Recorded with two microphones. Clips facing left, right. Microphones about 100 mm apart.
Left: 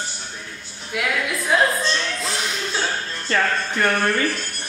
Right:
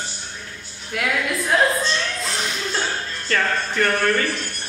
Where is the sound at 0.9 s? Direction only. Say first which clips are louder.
Right 1 dB; centre (ahead or behind).